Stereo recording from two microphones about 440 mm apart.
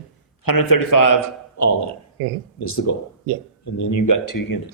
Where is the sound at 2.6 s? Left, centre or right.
Left.